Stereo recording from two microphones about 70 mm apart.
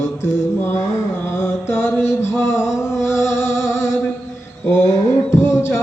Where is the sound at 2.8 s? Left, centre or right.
Left.